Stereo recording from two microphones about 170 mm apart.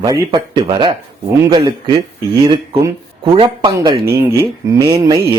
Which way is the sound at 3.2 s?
35° right (ahead or behind).